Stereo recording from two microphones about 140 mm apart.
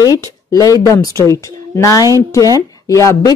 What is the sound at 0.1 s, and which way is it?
Speech, 25° left (ahead or behind).